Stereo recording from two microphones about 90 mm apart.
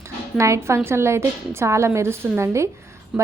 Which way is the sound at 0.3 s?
35° right (ahead or behind).